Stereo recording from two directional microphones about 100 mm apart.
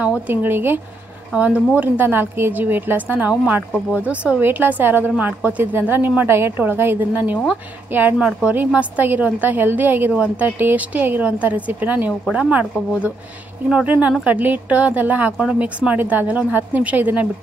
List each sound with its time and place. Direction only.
0.3 s a woman's voice: 20° right (ahead or behind)
13.7 s a woman's voice: 10° right (ahead or behind)